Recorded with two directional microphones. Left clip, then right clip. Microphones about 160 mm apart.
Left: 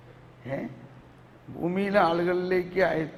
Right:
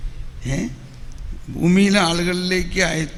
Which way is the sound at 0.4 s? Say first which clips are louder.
Right 6 dB; 20° right (ahead or behind).